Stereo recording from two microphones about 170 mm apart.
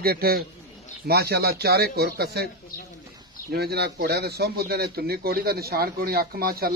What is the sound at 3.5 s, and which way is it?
A man's voice, 70° right (ahead or behind).